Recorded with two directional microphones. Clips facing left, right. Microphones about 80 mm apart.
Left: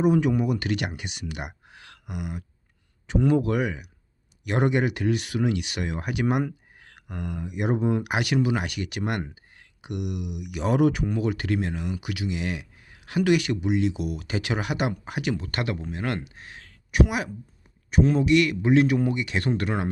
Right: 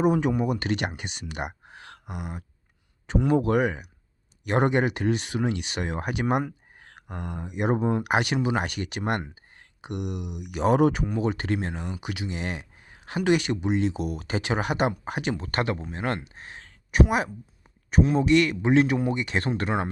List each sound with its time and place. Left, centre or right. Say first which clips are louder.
0.0 s speech: left 1 dB; right